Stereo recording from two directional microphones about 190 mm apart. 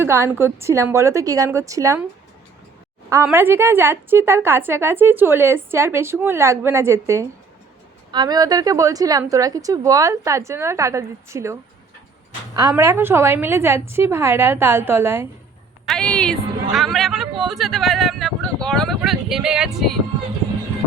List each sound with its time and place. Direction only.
0.0 s a woman's voice: 10° right (ahead or behind)
3.2 s a woman's voice: 10° right (ahead or behind)
12.5 s a woman's voice: 15° right (ahead or behind)
15.9 s speech: 5° left (ahead or behind)